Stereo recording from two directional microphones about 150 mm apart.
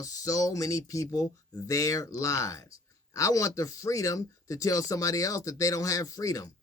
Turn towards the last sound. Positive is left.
turn(degrees=20)  # may be behind; listen again after turning